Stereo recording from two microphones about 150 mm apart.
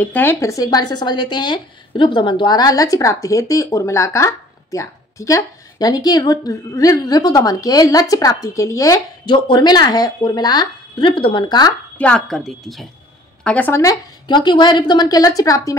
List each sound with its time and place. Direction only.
0.0 s speech: 15° left (ahead or behind); by 11.7 s 30° left (ahead or behind)
12.0 s a woman's voice: 5° left (ahead or behind); by 15.7 s 25° left (ahead or behind)